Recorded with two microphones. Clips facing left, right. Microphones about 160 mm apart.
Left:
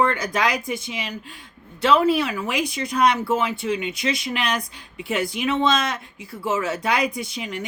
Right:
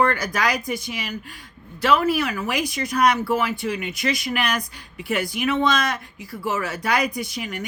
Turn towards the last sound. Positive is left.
turn(degrees=30)  # may be behind; listen again after turning